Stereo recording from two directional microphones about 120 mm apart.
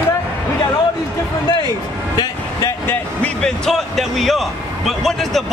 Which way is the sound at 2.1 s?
35° left (ahead or behind).